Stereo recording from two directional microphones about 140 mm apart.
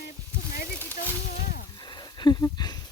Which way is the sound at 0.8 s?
15° left (ahead or behind).